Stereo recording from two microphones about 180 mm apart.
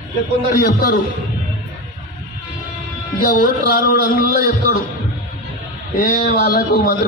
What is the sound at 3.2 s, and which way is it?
A man's voice, 50° left (ahead or behind).